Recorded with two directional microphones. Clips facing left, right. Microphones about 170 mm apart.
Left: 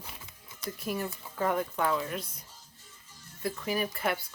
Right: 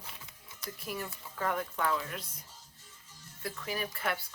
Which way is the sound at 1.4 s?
20° left (ahead or behind).